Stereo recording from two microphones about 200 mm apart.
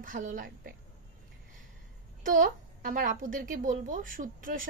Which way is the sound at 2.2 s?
40° right (ahead or behind).